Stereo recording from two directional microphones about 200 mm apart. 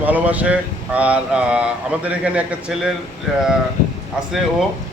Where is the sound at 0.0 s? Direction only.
10° right (ahead or behind).